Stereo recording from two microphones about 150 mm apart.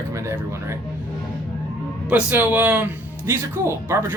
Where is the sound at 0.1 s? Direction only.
20° right (ahead or behind).